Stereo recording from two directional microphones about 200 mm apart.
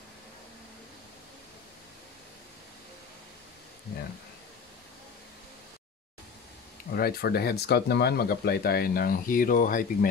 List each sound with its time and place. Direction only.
6.9 s speech: 50° left (ahead or behind)